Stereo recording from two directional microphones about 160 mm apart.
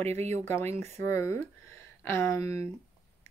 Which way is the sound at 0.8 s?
15° left (ahead or behind).